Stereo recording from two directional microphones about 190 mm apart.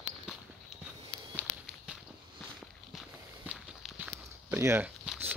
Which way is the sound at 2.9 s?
5° right (ahead or behind).